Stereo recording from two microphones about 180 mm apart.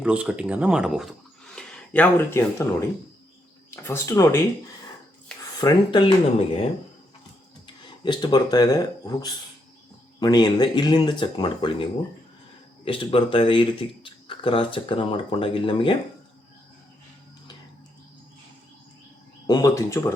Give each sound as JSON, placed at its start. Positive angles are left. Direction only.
{"t": 0.0, "sound": "speech", "side_deg": -5}
{"t": 3.8, "sound": "speech", "side_deg": 15}
{"t": 5.5, "sound": "speech", "side_deg": 25}
{"t": 6.1, "sound": "speech", "side_deg": 35}
{"t": 8.0, "sound": "speech", "side_deg": 25}
{"t": 19.5, "sound": "speech", "side_deg": 20}